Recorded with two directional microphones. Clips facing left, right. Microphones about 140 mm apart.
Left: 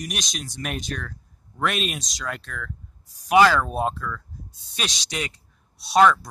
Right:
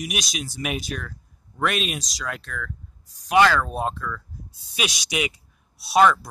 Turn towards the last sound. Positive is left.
turn(degrees=-5)  # may be behind; listen again after turning